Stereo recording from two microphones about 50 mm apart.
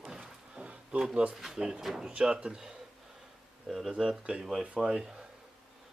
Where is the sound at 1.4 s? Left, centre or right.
Centre.